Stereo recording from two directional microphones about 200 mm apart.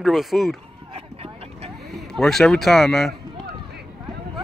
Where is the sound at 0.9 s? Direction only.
30° right (ahead or behind).